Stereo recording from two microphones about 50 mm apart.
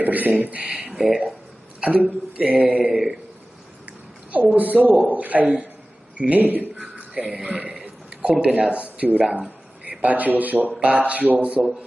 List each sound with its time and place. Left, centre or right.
0.0 s speech: right
0.9 s speech: centre
1.8 s speech: right
4.6 s a man's voice: right
7.8 s burping: right
8.6 s speech: right